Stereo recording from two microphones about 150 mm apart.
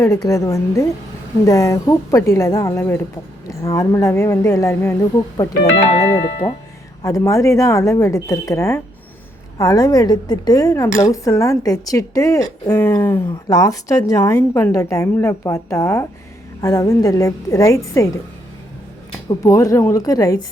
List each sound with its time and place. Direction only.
0.0 s a woman's voice: 20° left (ahead or behind)
5.7 s speech: 40° left (ahead or behind)
7.0 s a woman's voice: 20° left (ahead or behind)
19.3 s a woman's voice: 20° left (ahead or behind)